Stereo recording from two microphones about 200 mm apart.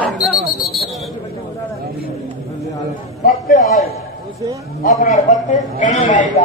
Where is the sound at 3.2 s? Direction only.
40° left (ahead or behind).